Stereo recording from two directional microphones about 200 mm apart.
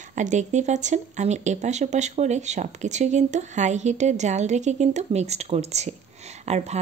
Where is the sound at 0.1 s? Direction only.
35° right (ahead or behind).